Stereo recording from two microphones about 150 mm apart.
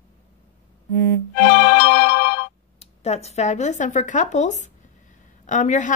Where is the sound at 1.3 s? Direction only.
80° left.